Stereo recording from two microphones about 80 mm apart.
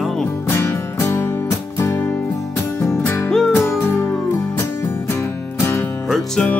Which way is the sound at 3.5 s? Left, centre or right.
Left.